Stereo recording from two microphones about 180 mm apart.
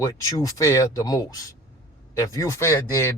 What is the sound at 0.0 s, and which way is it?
A man's voice, 20° left (ahead or behind).